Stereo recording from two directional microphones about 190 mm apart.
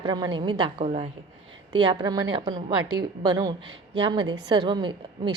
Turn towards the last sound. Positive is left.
turn(degrees=-25)  # may be behind; listen again after turning